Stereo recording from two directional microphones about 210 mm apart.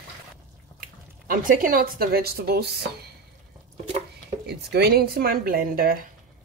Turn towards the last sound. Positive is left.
turn(degrees=-45)  # may be behind; listen again after turning